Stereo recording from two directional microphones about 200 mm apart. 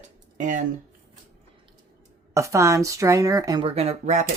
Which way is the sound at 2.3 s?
15° right (ahead or behind).